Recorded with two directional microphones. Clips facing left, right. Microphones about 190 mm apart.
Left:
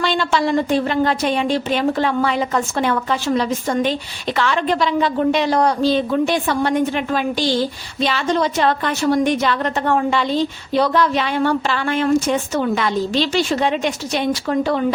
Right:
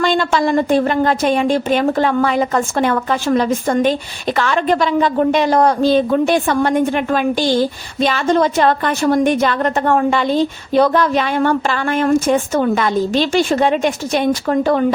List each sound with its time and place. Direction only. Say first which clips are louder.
0.0 s a woman's voice: right 3 dB; 50° right (ahead or behind)